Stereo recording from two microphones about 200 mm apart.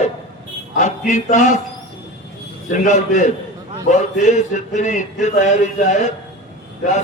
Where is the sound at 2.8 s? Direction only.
40° left (ahead or behind).